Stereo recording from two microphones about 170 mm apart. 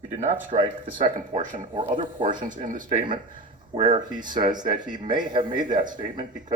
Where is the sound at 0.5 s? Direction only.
40° right (ahead or behind).